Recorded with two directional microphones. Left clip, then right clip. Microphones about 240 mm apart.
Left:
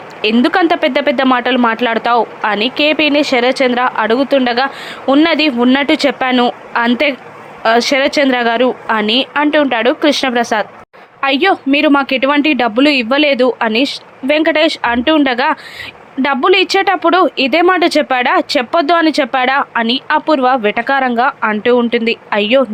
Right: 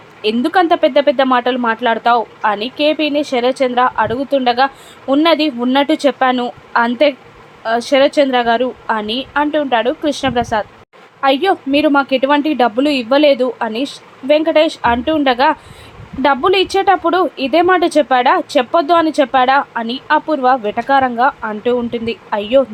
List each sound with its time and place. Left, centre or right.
0.2 s speech: left